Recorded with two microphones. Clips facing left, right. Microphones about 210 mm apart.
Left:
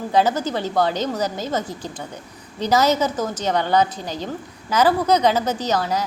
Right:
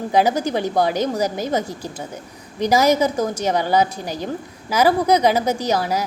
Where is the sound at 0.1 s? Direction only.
10° right (ahead or behind).